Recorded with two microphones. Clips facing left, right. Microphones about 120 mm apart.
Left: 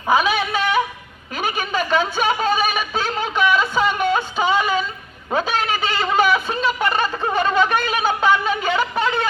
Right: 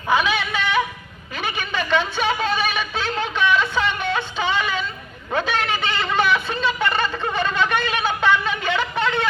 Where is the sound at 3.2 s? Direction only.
10° left (ahead or behind).